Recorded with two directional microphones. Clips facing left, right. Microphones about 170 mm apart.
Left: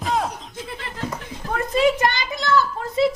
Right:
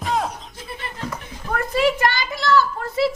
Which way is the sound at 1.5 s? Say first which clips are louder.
Left 1 dB; 20° left (ahead or behind).